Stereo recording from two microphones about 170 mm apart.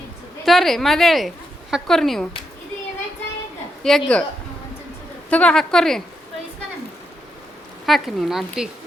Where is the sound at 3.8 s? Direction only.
5° left (ahead or behind).